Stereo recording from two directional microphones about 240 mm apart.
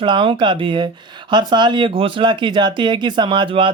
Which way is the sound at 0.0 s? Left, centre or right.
Right.